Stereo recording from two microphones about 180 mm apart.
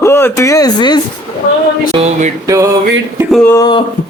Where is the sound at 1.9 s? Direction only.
35° right (ahead or behind).